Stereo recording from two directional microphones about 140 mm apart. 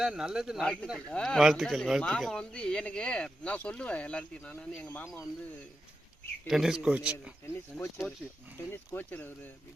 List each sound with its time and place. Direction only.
0.0 s a man's voice: 5° right (ahead or behind)
6.5 s a man's voice: 5° right (ahead or behind)
7.4 s speech: 15° left (ahead or behind)